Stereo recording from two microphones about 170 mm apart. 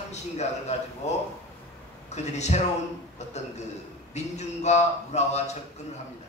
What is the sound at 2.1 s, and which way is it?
A man's voice, 40° left (ahead or behind).